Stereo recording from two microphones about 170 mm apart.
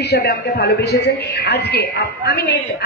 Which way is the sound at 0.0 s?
75° left (ahead or behind).